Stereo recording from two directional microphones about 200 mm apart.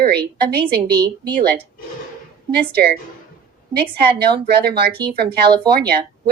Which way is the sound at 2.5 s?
50° right (ahead or behind).